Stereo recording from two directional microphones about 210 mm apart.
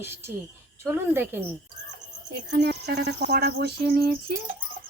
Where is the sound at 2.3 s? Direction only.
55° right (ahead or behind).